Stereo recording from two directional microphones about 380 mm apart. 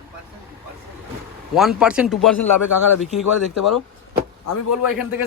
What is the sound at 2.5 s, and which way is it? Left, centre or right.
A man's voice, left.